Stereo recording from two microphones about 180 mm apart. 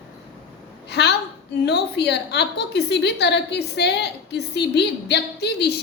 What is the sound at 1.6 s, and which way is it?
A woman's voice, 70° left (ahead or behind).